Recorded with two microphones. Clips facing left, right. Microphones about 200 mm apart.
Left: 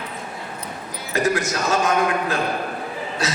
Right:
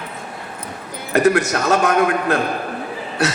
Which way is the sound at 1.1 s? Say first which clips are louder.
Right 6 dB; 60° right (ahead or behind).